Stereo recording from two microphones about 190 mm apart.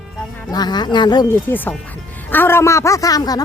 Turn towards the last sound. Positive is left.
turn(degrees=20)  # may be behind; listen again after turning